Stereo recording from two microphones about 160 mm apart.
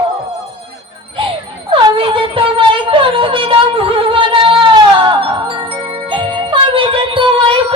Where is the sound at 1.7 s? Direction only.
30° right (ahead or behind).